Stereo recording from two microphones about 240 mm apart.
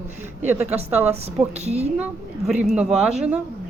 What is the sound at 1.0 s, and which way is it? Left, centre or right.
Speech, right.